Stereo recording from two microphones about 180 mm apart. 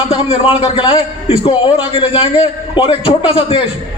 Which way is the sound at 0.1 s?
30° left (ahead or behind).